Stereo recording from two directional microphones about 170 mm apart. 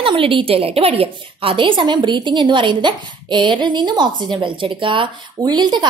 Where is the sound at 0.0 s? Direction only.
30° right (ahead or behind).